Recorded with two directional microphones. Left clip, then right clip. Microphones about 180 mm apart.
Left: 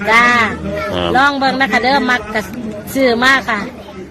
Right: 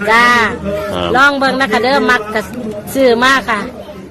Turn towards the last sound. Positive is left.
turn(degrees=-10)  # may be behind; listen again after turning